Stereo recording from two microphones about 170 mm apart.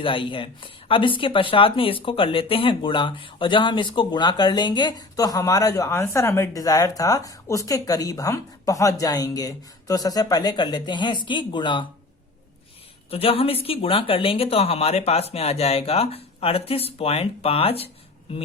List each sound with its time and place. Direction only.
0.0 s speech: 30° left (ahead or behind)
13.1 s speech: 35° left (ahead or behind)